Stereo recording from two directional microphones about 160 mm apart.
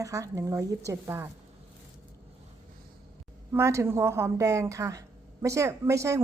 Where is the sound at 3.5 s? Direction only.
15° right (ahead or behind).